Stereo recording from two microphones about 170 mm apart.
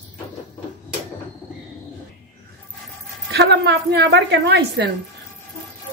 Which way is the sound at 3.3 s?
80° right.